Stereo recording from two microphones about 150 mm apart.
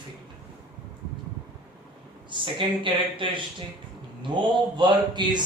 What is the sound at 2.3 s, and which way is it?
Speech, 35° right (ahead or behind).